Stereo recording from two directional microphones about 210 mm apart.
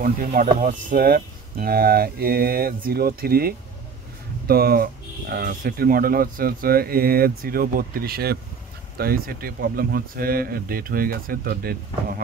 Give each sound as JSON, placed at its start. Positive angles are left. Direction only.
{"t": 0.0, "sound": "speech", "side_deg": -40}